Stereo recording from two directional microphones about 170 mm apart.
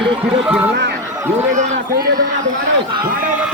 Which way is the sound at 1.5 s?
45° right (ahead or behind).